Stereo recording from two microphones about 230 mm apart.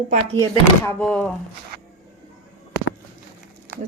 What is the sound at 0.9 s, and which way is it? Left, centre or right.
Speech, centre.